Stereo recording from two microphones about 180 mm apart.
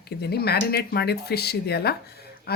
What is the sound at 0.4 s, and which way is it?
Speech, 65° left (ahead or behind).